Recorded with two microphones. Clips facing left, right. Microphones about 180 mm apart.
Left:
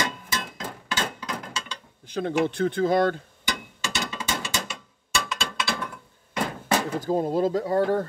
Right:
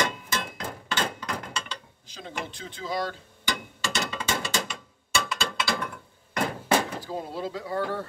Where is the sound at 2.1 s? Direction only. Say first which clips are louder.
Left 13 dB; 60° left (ahead or behind).